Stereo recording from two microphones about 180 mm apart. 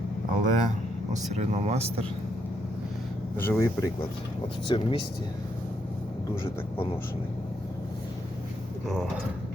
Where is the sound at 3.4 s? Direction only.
15° left (ahead or behind).